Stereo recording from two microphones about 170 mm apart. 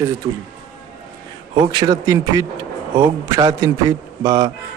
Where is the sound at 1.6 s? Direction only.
25° right (ahead or behind).